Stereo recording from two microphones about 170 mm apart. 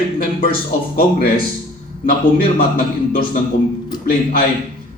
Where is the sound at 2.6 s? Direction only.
60° left (ahead or behind).